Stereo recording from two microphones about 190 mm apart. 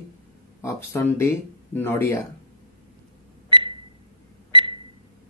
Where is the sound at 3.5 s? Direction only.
25° right (ahead or behind).